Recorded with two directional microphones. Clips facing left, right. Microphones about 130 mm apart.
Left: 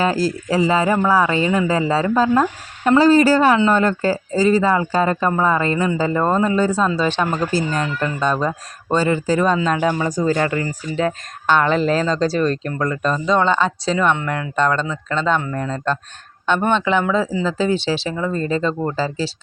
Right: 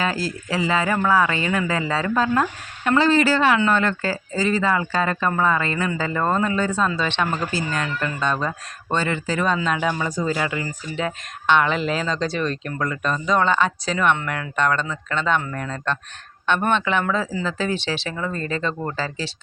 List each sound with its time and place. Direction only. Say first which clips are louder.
0.0 s speech: left 6 dB; 35° left (ahead or behind)
15.4 s speech: left 4 dB; 20° left (ahead or behind)